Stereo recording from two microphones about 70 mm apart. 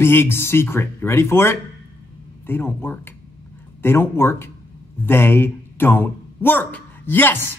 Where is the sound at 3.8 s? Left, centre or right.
Left.